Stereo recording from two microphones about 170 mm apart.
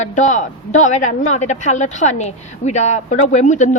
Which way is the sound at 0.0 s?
45° left (ahead or behind).